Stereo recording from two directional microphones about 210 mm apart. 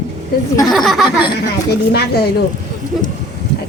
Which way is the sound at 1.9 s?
50° left (ahead or behind).